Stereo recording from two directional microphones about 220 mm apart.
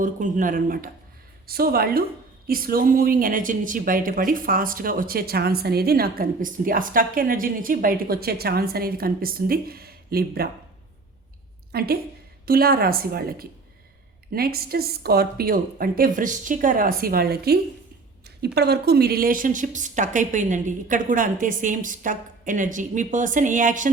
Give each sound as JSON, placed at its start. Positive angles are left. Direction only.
{"t": 0.0, "sound": "a woman's voice", "side_deg": -35}
{"t": 11.7, "sound": "a woman's voice", "side_deg": -45}